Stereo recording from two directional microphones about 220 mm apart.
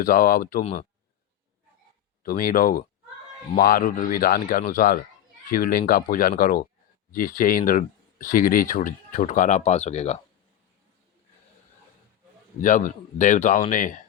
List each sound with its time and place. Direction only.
0.0 s speech: 40° left (ahead or behind)
2.2 s speech: 40° left (ahead or behind)
12.6 s speech: 35° left (ahead or behind)